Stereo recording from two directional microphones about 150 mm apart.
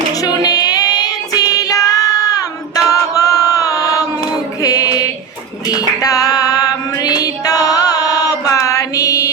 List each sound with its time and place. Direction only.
0.2 s child singing: 25° left (ahead or behind)
2.9 s chant: 25° left (ahead or behind)
4.6 s music: 25° left (ahead or behind)